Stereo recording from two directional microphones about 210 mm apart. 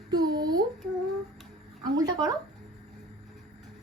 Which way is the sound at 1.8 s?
20° right (ahead or behind).